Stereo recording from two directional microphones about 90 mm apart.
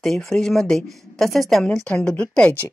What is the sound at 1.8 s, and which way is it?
Speech, 10° left (ahead or behind).